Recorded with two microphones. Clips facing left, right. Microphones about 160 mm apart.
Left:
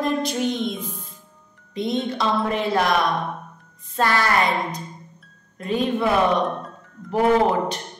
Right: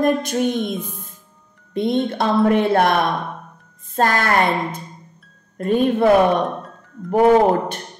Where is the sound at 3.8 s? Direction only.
45° right (ahead or behind).